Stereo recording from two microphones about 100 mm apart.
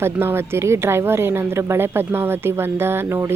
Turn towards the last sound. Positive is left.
turn(degrees=-25)  # may be behind; listen again after turning